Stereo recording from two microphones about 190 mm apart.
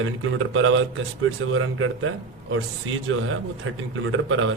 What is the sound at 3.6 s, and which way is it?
Speech, 90° right.